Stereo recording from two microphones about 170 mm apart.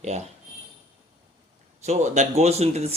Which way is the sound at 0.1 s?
40° right (ahead or behind).